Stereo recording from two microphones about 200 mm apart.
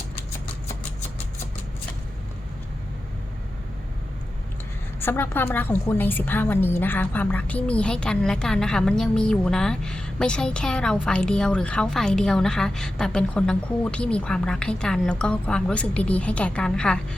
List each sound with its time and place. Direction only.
4.9 s a woman's voice: 10° left (ahead or behind)